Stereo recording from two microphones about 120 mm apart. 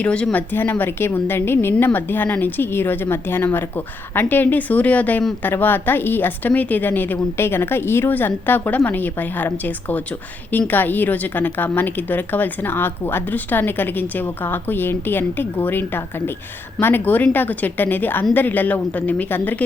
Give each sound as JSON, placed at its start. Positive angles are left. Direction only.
{"t": 0.0, "sound": "speech", "side_deg": 10}